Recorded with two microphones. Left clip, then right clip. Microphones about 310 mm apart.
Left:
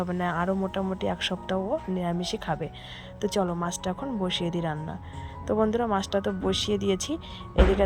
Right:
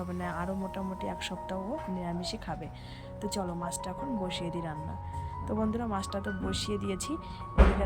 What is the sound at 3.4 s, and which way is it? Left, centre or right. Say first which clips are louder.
Speech: left 8 dB; left.